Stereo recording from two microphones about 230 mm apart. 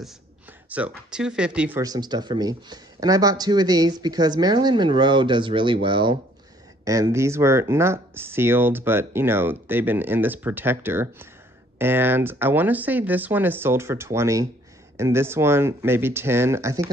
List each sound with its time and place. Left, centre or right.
0.7 s speech: centre